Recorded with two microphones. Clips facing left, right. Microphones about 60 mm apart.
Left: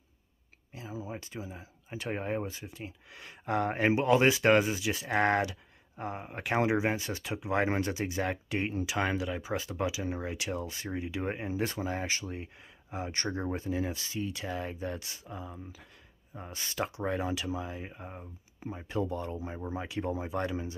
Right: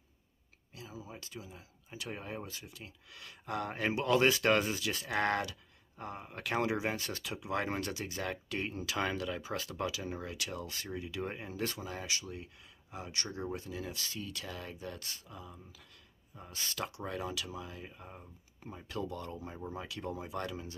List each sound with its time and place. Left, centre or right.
0.7 s a sound: left
1.2 s speech: left
2.4 s speech: left
7.2 s speech: left
13.9 s speech: left
15.0 s speech: centre
15.2 s speech: left
18.2 s speech: centre
18.8 s speech: left